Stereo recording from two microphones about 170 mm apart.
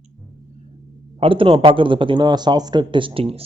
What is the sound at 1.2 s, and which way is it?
A man's voice, 30° right (ahead or behind).